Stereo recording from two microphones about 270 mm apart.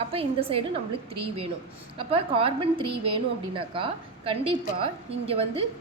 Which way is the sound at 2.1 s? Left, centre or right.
Centre.